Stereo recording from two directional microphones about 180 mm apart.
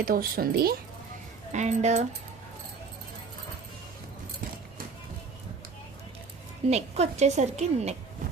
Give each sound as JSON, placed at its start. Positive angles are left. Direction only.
{"t": 0.0, "sound": "a woman's voice", "side_deg": -55}
{"t": 1.5, "sound": "a woman's voice", "side_deg": -40}
{"t": 6.7, "sound": "a woman's voice", "side_deg": -35}